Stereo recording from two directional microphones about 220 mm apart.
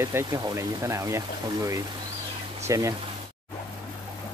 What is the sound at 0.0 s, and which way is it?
Speech, 10° right (ahead or behind).